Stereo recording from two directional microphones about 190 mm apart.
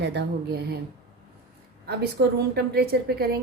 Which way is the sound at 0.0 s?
60° right (ahead or behind).